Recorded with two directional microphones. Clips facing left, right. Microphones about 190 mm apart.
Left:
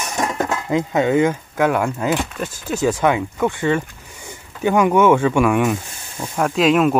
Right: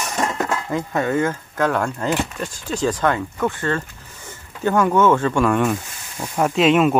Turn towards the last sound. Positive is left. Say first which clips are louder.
# even
turn(degrees=0)  # may be behind; listen again after turning